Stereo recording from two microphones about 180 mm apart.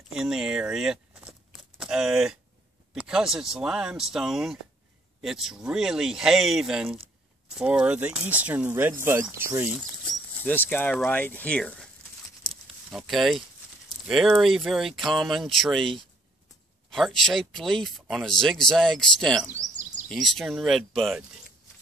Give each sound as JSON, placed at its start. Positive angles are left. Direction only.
{"t": 0.1, "sound": "a sound", "side_deg": 0}
{"t": 2.9, "sound": "speech", "side_deg": -5}
{"t": 10.4, "sound": "speech", "side_deg": 10}
{"t": 12.9, "sound": "speech", "side_deg": 0}
{"t": 19.6, "sound": "a sound", "side_deg": -45}
{"t": 20.1, "sound": "speech", "side_deg": 0}